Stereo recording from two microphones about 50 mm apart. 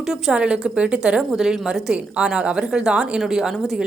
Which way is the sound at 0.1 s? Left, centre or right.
Centre.